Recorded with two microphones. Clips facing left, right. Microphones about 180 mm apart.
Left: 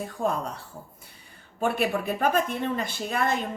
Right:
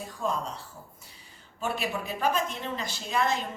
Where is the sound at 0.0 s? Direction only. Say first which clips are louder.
Left 4 dB; 55° left (ahead or behind).